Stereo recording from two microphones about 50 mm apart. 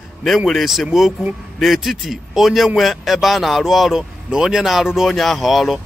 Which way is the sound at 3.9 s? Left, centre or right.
Centre.